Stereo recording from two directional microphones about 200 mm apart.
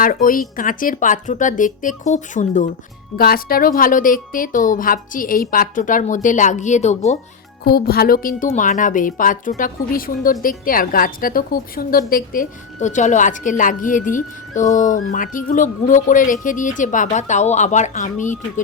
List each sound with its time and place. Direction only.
0.0 s a woman's voice: 45° left (ahead or behind)
3.2 s a woman's voice: 50° left (ahead or behind)
7.6 s a woman's voice: 50° left (ahead or behind)